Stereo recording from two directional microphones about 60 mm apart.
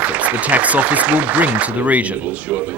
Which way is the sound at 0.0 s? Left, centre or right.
Right.